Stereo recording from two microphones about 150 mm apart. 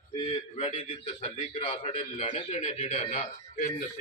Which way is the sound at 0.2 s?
35° left (ahead or behind).